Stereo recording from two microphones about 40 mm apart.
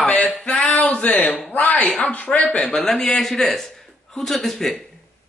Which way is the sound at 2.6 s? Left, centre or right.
Centre.